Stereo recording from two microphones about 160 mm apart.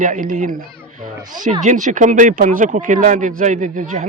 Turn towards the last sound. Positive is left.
turn(degrees=-50)  # may be behind; listen again after turning